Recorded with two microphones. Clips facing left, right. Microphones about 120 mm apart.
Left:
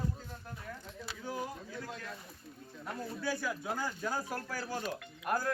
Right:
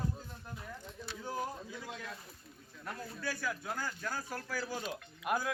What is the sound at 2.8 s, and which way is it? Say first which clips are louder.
Speech: left 3 dB; 10° left (ahead or behind).